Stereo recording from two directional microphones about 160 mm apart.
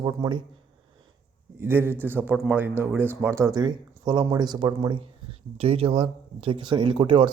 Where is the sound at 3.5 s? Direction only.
30° right (ahead or behind).